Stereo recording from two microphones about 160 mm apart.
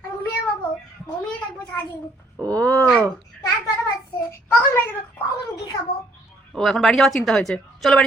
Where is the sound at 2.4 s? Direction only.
5° left (ahead or behind).